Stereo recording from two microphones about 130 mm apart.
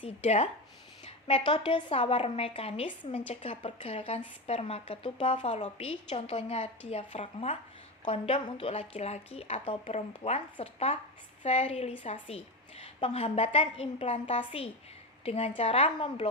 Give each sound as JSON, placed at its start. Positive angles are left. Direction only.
{"t": 0.0, "sound": "a woman's voice", "side_deg": 50}
{"t": 5.4, "sound": "a woman's voice", "side_deg": 60}